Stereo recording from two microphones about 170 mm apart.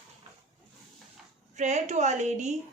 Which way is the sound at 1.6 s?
45° right (ahead or behind).